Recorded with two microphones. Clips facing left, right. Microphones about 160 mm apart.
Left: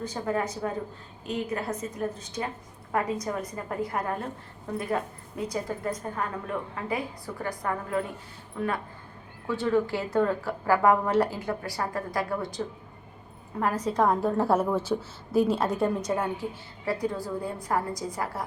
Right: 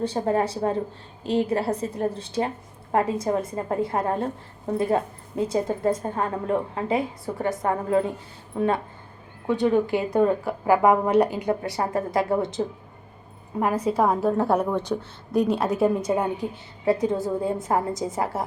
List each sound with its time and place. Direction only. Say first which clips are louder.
0.0 s a woman's voice: right 6 dB; 30° right (ahead or behind)
13.6 s a woman's voice: right 3 dB; 10° right (ahead or behind)